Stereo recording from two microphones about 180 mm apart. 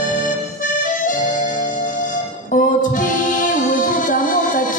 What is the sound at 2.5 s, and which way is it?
Music, 45° left (ahead or behind).